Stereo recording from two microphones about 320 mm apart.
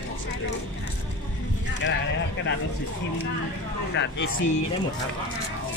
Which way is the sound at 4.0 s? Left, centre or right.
Left.